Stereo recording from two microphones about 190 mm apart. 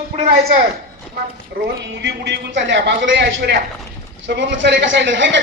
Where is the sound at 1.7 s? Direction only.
65° right (ahead or behind).